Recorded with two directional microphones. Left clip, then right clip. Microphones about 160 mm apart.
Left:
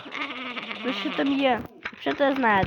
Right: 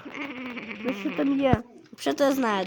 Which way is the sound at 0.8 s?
25° left (ahead or behind).